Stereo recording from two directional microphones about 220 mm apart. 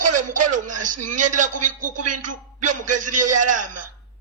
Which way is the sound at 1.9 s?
90° right.